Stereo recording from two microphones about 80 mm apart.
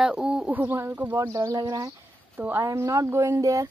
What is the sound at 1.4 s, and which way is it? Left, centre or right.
Speech, right.